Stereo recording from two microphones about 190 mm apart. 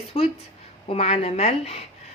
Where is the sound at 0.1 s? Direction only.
35° left (ahead or behind).